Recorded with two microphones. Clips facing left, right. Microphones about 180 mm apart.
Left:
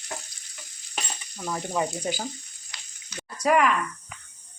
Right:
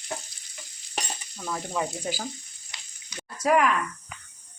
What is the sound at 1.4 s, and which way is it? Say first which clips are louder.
Speech: left 2 dB; 15° left (ahead or behind).